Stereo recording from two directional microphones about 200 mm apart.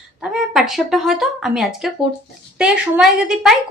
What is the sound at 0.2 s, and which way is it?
A woman's voice, centre (ahead or behind).